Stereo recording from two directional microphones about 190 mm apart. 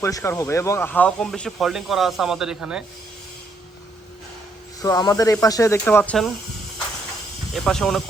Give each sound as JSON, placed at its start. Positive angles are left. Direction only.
{"t": 0.0, "sound": "speech", "side_deg": 15}
{"t": 4.8, "sound": "speech", "side_deg": 20}
{"t": 7.5, "sound": "speech", "side_deg": 0}